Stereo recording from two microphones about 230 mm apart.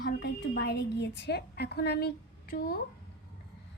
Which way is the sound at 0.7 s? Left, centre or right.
Left.